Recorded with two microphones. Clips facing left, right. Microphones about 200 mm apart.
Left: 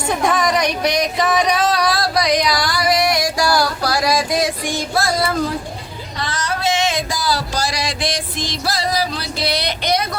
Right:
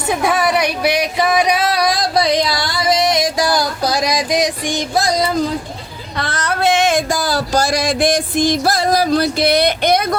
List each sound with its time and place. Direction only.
0.1 s singing: 10° right (ahead or behind)
2.1 s music: 25° right (ahead or behind)
6.1 s a sound: 60° right (ahead or behind)